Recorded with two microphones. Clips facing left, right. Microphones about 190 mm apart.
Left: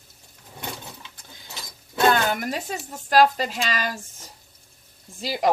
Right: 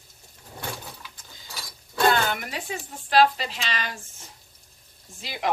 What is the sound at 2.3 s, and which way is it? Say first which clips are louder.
Speech: left 4 dB; 40° left (ahead or behind).